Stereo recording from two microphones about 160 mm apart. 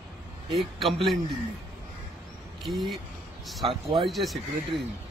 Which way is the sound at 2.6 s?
Centre (ahead or behind).